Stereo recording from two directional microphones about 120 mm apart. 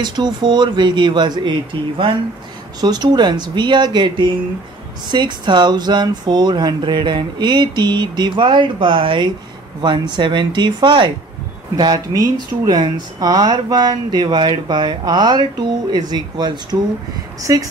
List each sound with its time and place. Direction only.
0.0 s speech: 35° right (ahead or behind)
11.7 s speech: 30° right (ahead or behind)